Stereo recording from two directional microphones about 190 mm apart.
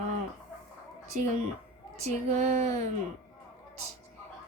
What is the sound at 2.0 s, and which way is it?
Child singing, 35° right (ahead or behind).